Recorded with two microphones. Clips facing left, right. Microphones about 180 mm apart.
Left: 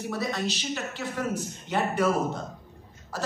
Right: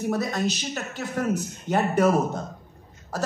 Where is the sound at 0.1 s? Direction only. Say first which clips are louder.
Right 3 dB; 45° right (ahead or behind).